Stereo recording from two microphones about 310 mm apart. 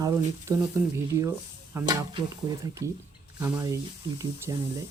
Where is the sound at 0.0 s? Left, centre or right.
Centre.